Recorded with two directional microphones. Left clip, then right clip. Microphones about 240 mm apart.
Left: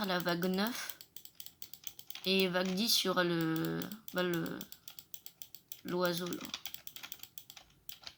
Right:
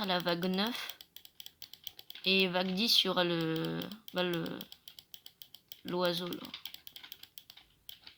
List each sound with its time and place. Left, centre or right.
0.0 s speech: centre
2.2 s speech: centre
5.9 s speech: centre